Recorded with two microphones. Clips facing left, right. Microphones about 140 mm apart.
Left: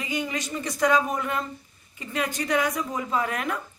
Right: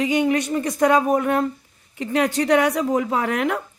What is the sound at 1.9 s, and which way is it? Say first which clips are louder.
Speech: right 9 dB; 70° right (ahead or behind).